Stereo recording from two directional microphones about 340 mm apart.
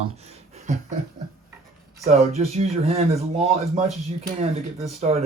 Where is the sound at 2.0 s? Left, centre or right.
Centre.